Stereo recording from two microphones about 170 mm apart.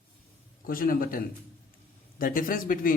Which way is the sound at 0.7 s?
55° left (ahead or behind).